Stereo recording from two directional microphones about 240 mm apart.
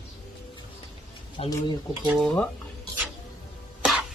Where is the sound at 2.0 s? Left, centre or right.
Centre.